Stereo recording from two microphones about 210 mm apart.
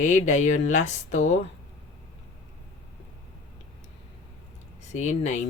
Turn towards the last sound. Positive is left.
turn(degrees=35)  # may be behind; listen again after turning